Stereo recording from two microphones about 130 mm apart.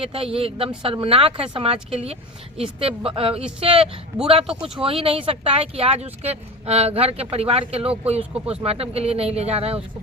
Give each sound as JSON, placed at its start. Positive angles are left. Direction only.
{"t": 0.0, "sound": "speech", "side_deg": -45}
{"t": 2.8, "sound": "speech", "side_deg": -45}